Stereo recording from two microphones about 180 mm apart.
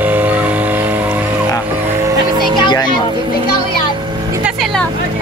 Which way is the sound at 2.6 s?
25° left (ahead or behind).